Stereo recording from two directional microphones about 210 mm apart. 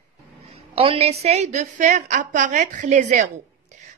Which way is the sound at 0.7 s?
30° right (ahead or behind).